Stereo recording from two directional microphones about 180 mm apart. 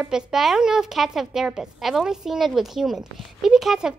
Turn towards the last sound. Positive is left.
turn(degrees=-5)  # may be behind; listen again after turning